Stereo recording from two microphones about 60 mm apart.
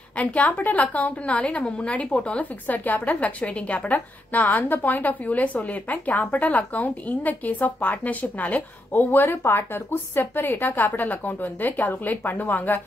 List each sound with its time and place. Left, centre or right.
0.2 s a woman's voice: left